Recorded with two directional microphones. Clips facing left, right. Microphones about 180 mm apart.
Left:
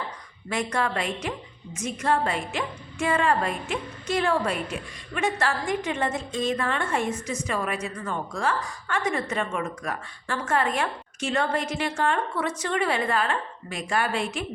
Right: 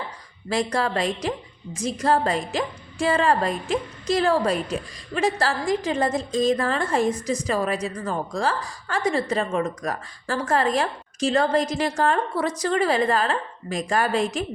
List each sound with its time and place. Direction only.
0.5 s a woman's voice: 35° right (ahead or behind)